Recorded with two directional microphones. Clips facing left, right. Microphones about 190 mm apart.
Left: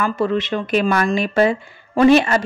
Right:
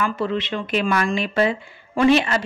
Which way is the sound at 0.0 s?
45° left (ahead or behind).